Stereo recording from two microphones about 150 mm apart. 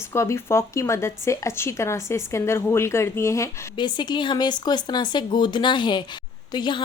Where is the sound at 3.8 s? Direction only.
30° left (ahead or behind).